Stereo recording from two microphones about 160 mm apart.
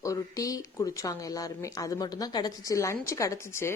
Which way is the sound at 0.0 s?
20° left (ahead or behind).